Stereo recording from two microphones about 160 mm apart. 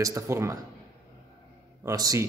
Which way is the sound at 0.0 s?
20° right (ahead or behind).